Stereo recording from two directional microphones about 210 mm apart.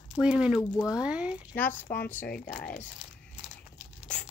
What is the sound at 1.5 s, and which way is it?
Speech, 10° left (ahead or behind).